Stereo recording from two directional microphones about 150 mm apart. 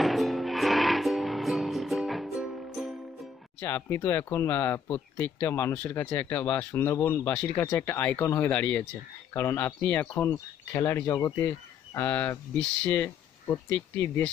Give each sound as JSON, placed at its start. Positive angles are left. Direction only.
{"t": 0.0, "sound": "music", "side_deg": 0}
{"t": 3.6, "sound": "speech", "side_deg": 15}